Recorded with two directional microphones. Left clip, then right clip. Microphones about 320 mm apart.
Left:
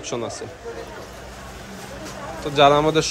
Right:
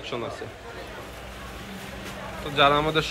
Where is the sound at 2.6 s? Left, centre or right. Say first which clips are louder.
Left 5 dB; centre.